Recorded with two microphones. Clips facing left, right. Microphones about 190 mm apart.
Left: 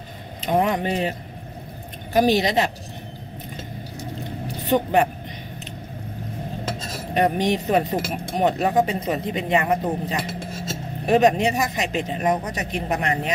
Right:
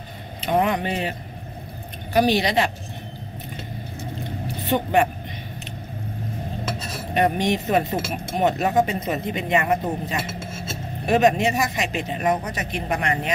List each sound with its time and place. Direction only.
0.4 s speech: 40° left (ahead or behind)
2.1 s speech: 40° left (ahead or behind)
4.6 s speech: 40° left (ahead or behind)
7.2 s speech: 35° left (ahead or behind)